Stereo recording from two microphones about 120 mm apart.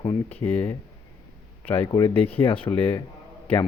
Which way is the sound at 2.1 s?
50° left (ahead or behind).